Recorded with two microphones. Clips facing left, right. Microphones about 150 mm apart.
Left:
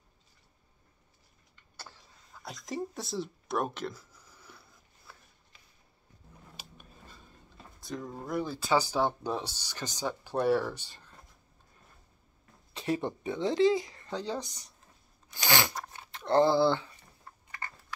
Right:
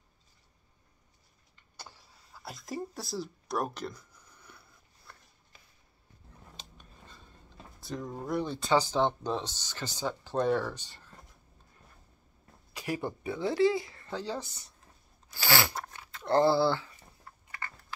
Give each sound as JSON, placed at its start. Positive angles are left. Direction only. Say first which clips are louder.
{"t": 1.8, "sound": "a sound", "louder": "even", "side_deg": -10}
{"t": 6.5, "sound": "a sound", "louder": "left 2 dB", "side_deg": 10}
{"t": 7.8, "sound": "speech", "louder": "right 1 dB", "side_deg": 0}
{"t": 12.7, "sound": "speech", "louder": "left 3 dB", "side_deg": 25}
{"t": 15.3, "sound": "crunch", "louder": "even", "side_deg": 20}
{"t": 15.9, "sound": "dog", "louder": "left 1 dB", "side_deg": 20}
{"t": 17.6, "sound": "horse", "louder": "even", "side_deg": 20}